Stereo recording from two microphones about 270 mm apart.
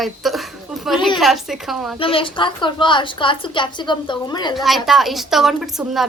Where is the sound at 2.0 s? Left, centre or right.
Centre.